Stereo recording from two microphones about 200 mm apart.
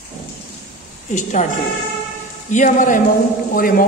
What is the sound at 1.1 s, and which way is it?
Speech, 40° left (ahead or behind).